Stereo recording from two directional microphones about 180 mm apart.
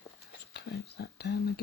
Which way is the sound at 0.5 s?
65° left (ahead or behind).